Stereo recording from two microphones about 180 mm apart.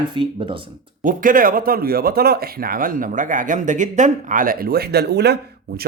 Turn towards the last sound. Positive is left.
turn(degrees=-65)  # may be behind; listen again after turning